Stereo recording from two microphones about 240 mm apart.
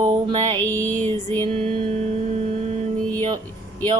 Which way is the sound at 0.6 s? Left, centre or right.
Centre.